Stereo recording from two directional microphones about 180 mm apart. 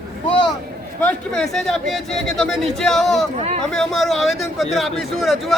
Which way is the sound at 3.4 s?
35° right (ahead or behind).